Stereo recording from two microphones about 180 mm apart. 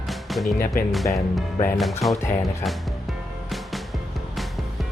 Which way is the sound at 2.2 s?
15° left (ahead or behind).